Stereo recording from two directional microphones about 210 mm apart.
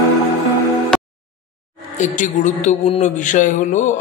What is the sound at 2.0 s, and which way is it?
A man's voice, 35° left (ahead or behind).